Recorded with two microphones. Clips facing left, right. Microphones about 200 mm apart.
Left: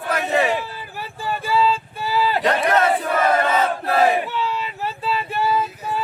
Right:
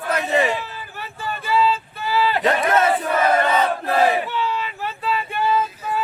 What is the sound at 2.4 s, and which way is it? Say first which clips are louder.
Speech: even; centre (ahead or behind).